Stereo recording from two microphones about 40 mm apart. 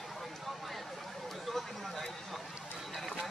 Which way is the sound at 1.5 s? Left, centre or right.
Centre.